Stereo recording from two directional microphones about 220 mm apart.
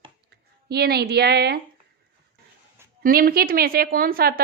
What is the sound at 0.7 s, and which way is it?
Speech, 45° right (ahead or behind).